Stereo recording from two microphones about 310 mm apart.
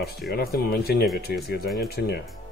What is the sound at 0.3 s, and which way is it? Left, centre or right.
Speech, left.